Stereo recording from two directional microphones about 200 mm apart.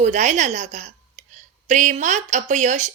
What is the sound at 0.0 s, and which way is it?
A woman's voice, 35° right (ahead or behind).